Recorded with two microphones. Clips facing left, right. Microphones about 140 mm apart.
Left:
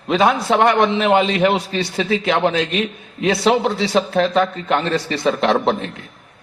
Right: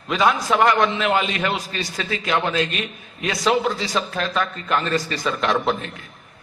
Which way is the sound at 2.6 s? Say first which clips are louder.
Left 4 dB; 90° left.